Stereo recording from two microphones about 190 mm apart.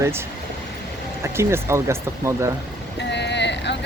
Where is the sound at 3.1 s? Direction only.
65° left (ahead or behind).